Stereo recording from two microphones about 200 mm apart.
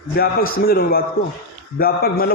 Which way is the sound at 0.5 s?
50° left (ahead or behind).